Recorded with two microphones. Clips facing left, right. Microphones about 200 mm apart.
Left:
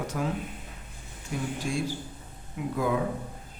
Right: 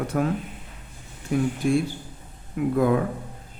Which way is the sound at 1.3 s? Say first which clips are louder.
Right 10 dB; 55° right (ahead or behind).